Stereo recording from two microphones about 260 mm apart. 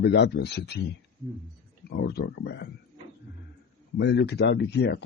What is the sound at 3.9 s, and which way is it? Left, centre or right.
A man's voice, left.